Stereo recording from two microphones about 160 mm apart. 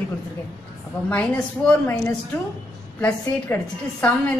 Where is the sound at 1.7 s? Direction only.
10° left (ahead or behind).